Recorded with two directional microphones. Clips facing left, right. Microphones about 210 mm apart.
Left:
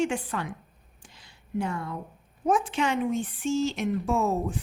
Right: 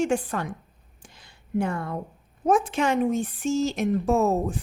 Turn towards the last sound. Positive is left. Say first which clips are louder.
# right 4 dB
turn(degrees=-40)  # may be behind; listen again after turning